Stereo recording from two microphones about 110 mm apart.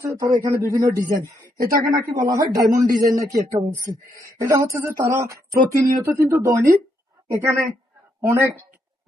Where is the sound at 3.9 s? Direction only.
35° right (ahead or behind).